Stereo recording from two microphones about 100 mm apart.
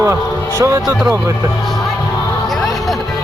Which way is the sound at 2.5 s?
Centre (ahead or behind).